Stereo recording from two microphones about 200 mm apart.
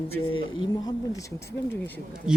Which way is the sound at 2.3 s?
5° right (ahead or behind).